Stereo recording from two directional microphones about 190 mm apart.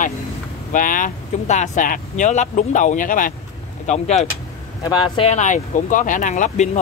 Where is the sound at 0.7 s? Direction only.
45° left (ahead or behind).